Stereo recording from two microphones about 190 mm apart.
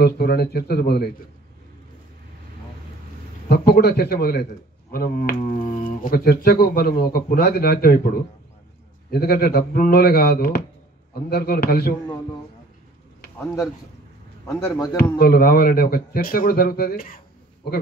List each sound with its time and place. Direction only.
0.0 s speech: 55° left (ahead or behind)
3.4 s speech: 55° left (ahead or behind)
14.4 s a man's voice: 15° left (ahead or behind)
15.1 s speech: 55° left (ahead or behind)